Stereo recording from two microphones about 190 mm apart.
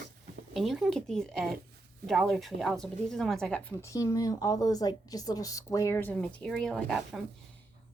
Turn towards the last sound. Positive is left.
turn(degrees=0)  # may be behind; listen again after turning